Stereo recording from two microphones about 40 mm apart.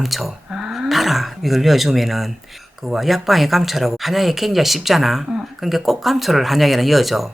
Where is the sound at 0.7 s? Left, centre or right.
Centre.